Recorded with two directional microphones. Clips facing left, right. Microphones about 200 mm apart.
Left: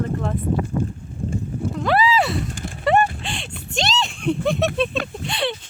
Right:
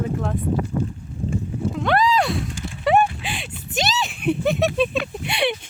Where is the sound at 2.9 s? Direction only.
5° right (ahead or behind).